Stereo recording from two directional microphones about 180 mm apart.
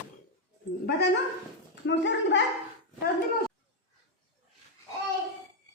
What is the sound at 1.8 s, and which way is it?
Speech, 80° left.